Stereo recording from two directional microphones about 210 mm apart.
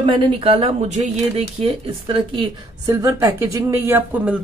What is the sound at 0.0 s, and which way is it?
Speech, 25° right (ahead or behind).